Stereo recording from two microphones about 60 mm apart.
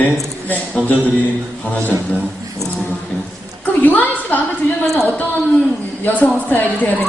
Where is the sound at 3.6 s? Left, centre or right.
Left.